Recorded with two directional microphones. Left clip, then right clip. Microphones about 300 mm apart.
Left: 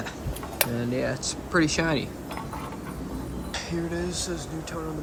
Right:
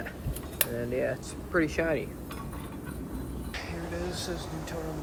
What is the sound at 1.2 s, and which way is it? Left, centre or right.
Speech, centre.